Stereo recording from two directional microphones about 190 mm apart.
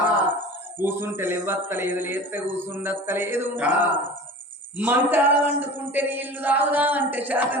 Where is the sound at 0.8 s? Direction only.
10° right (ahead or behind).